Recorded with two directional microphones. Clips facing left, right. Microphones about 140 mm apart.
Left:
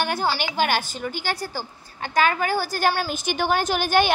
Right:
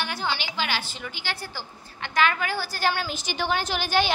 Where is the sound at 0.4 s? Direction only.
50° left (ahead or behind).